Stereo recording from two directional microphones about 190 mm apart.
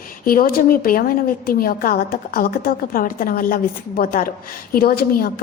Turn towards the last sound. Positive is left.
turn(degrees=50)  # may be behind; listen again after turning